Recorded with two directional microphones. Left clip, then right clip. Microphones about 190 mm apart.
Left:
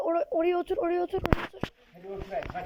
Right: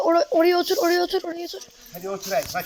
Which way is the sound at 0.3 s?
10° left (ahead or behind).